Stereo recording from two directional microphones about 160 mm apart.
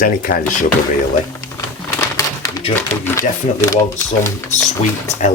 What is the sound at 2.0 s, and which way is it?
Bird, 20° left (ahead or behind).